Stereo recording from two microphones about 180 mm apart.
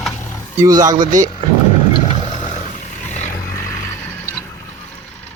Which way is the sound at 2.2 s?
40° left (ahead or behind).